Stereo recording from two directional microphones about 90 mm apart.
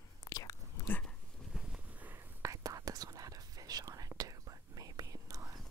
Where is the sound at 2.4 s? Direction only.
40° right (ahead or behind).